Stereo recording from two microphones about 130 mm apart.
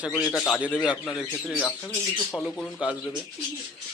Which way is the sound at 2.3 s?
10° left (ahead or behind).